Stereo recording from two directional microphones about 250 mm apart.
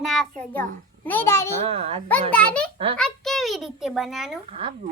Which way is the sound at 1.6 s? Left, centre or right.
Right.